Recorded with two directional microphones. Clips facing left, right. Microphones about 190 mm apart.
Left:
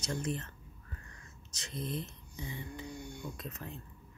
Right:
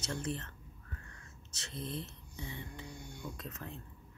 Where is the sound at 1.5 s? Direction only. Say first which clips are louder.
Left 3 dB; 15° left (ahead or behind).